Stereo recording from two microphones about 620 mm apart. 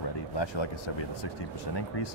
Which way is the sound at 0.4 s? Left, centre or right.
Left.